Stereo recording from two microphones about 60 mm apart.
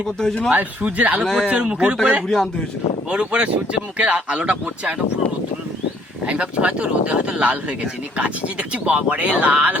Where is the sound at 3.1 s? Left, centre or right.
Centre.